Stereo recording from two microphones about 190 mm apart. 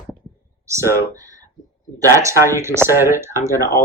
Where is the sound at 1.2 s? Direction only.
20° right (ahead or behind).